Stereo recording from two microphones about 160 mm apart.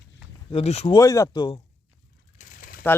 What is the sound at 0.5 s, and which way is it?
Speech, 40° left (ahead or behind).